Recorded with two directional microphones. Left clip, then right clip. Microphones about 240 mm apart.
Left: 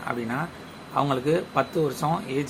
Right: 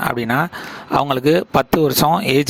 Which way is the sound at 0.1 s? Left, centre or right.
Right.